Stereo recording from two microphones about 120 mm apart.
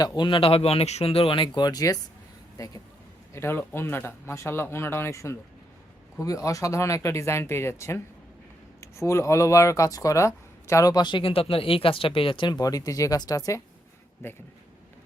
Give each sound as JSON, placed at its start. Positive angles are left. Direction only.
{"t": 0.0, "sound": "speech", "side_deg": 35}
{"t": 3.3, "sound": "speech", "side_deg": 20}
{"t": 14.2, "sound": "speech", "side_deg": 20}